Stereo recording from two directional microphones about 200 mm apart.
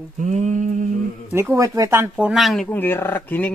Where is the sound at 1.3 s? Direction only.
15° right (ahead or behind).